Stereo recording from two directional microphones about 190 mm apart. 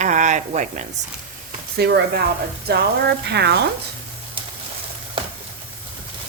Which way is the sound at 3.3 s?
60° right (ahead or behind).